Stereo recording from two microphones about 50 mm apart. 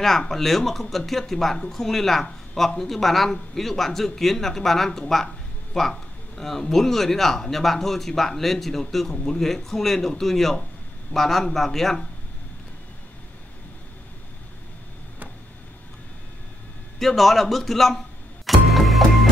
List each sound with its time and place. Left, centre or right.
0.0 s speech: centre
17.0 s music: centre